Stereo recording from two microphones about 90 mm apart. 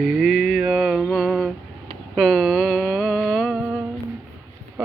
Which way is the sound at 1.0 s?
Centre (ahead or behind).